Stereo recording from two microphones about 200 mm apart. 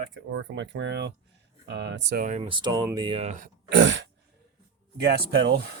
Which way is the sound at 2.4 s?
25° right (ahead or behind).